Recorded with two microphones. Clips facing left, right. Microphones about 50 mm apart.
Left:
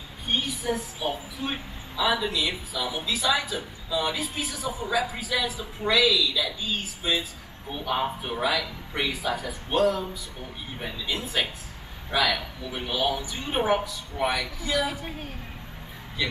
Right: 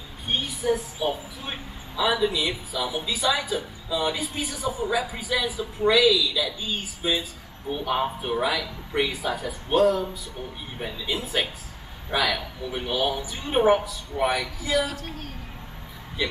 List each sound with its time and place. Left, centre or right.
0.3 s a woman's voice: centre
14.9 s a woman's voice: centre
16.2 s speech: centre